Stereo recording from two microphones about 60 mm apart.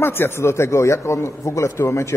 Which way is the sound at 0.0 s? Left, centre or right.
Left.